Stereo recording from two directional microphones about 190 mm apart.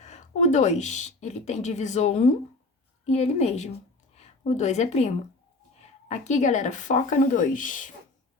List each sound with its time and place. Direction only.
0.0 s a woman's voice: 35° left (ahead or behind)